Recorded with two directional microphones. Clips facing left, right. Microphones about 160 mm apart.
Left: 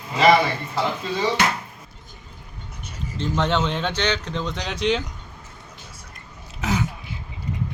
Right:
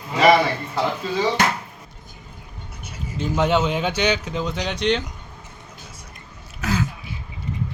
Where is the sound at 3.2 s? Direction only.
10° right (ahead or behind).